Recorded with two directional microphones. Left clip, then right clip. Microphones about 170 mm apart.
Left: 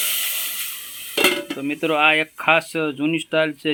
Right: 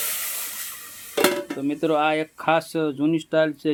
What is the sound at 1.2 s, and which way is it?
Dishes, 10° left (ahead or behind).